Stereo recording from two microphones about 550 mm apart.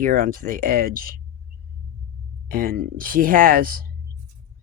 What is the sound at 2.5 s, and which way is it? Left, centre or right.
Speech, centre.